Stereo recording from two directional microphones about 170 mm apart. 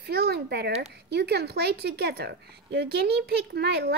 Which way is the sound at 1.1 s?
70° right (ahead or behind).